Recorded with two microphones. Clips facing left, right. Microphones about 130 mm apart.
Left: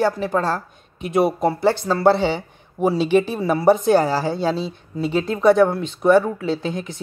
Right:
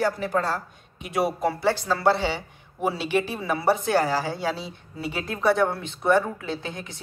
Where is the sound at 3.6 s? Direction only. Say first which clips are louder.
Left 7 dB; 20° left (ahead or behind).